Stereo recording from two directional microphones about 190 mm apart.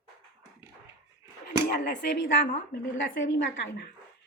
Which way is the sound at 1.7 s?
65° left (ahead or behind).